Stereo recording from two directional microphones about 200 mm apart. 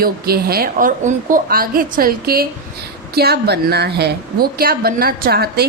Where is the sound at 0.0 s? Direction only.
50° right (ahead or behind).